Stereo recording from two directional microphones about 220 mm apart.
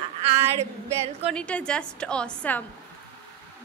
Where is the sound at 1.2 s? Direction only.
5° left (ahead or behind).